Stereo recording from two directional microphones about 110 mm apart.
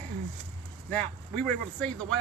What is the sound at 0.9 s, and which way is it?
Speech, 10° left (ahead or behind).